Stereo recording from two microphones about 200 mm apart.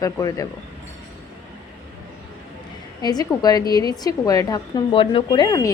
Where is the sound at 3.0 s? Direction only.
20° left (ahead or behind).